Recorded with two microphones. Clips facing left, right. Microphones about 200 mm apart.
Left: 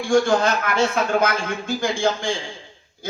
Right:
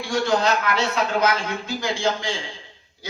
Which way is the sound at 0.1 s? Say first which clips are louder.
Left 3 dB; 50° left (ahead or behind).